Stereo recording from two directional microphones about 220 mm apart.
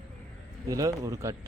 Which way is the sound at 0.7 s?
15° right (ahead or behind).